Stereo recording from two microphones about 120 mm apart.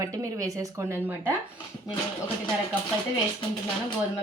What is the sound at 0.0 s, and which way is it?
A woman's voice, 30° right (ahead or behind).